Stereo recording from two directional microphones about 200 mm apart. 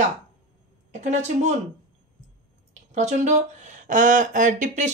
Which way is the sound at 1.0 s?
35° right (ahead or behind).